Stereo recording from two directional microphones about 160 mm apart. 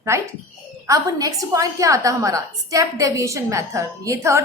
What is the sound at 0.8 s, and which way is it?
A woman's voice, 20° right (ahead or behind).